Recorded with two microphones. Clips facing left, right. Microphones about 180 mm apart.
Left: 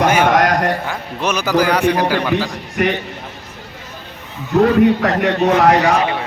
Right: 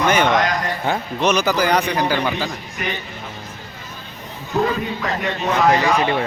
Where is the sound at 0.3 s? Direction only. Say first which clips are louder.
Left 5 dB; 65° left (ahead or behind).